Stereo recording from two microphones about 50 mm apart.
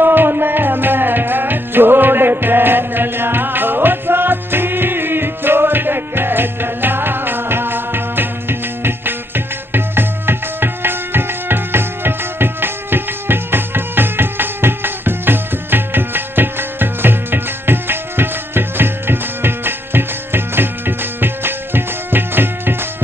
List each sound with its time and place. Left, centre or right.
0.0 s music: right